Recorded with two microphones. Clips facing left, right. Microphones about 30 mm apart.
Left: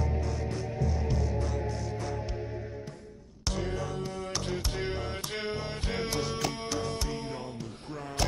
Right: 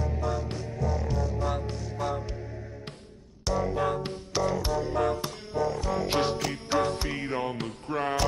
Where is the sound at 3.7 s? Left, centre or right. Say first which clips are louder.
Right 6 dB; right.